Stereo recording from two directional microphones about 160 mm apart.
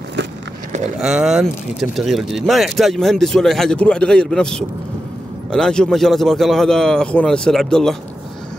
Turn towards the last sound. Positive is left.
turn(degrees=5)  # may be behind; listen again after turning